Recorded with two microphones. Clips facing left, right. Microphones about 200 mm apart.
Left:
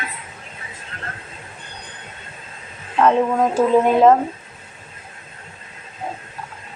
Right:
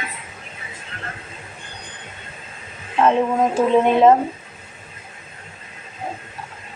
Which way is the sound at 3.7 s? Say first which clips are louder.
Even; 5° left (ahead or behind).